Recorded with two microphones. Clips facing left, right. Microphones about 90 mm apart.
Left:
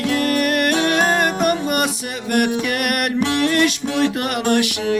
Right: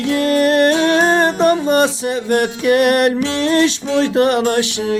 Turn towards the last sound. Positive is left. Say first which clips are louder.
# right 1 dB
turn(degrees=-30)  # may be behind; listen again after turning